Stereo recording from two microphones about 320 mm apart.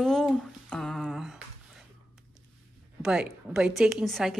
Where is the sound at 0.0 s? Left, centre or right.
Centre.